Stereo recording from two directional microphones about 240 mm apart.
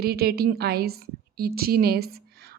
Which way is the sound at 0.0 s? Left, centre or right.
Right.